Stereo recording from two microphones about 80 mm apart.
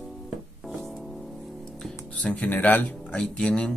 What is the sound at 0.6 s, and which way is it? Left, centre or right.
Music, centre.